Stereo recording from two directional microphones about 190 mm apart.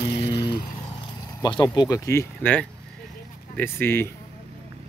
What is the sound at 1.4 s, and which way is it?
Speech, 20° left (ahead or behind).